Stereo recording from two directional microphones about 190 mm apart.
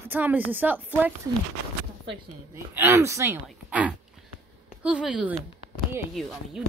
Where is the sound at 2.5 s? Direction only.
15° right (ahead or behind).